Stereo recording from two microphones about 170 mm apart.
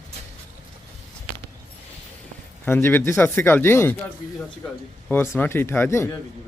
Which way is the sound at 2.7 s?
15° left (ahead or behind).